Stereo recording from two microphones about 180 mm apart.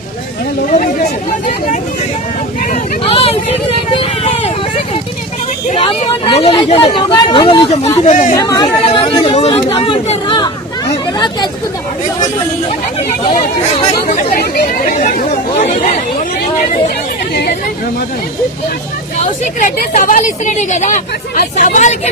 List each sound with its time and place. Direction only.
2.6 s vehicle: 35° left (ahead or behind)
5.7 s speech: 30° left (ahead or behind); by 8.4 s 45° left (ahead or behind)
8.4 s chatter: 20° left (ahead or behind)
14.2 s speech: 50° left (ahead or behind)
19.2 s a woman's voice: 45° left (ahead or behind)